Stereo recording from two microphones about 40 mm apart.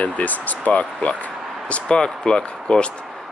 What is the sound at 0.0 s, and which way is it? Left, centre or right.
Speech, left.